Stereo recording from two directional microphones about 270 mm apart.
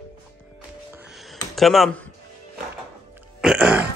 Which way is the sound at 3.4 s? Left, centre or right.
Centre.